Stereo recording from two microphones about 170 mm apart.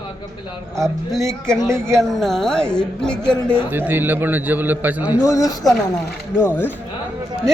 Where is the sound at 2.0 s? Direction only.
Centre (ahead or behind).